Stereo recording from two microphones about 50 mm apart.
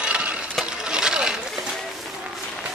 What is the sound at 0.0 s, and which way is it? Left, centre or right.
Coin, centre.